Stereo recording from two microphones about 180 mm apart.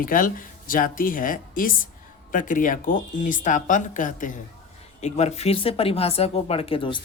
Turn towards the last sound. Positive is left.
turn(degrees=25)  # may be behind; listen again after turning